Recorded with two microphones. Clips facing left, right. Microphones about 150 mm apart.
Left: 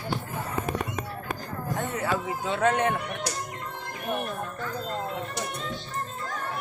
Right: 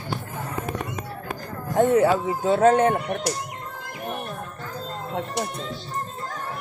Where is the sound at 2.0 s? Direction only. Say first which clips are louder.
Right 8 dB; 40° right (ahead or behind).